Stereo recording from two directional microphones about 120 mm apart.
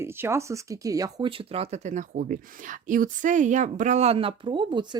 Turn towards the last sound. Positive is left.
turn(degrees=-40)  # may be behind; listen again after turning